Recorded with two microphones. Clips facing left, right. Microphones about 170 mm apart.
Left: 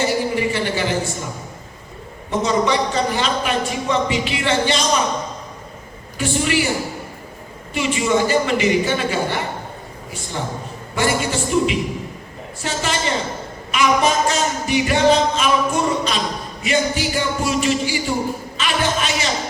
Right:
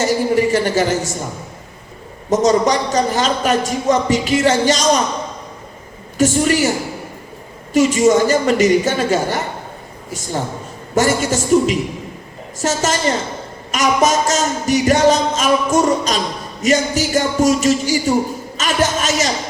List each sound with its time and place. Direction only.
0.0 s a sound: 40° right (ahead or behind)
2.3 s a man's voice: 40° right (ahead or behind)
6.1 s music: 40° right (ahead or behind)
7.7 s music: 40° right (ahead or behind)
10.1 s a man's voice: 40° right (ahead or behind)
12.5 s music: 40° right (ahead or behind)